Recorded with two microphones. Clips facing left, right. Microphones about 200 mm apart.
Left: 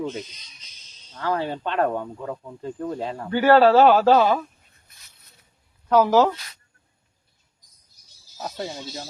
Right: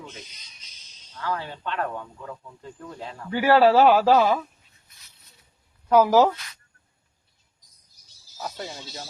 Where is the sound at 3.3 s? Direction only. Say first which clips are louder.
Left 2 dB; 10° right (ahead or behind).